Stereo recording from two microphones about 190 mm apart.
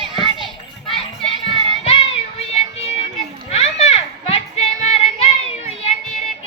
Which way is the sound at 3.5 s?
35° left (ahead or behind).